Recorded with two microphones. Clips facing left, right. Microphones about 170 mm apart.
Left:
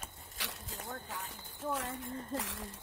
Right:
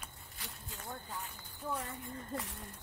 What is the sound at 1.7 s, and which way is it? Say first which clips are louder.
Speech: left 3 dB; 90° left.